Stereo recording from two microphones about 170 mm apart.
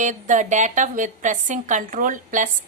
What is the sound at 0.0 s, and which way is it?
A woman's voice, 45° right (ahead or behind).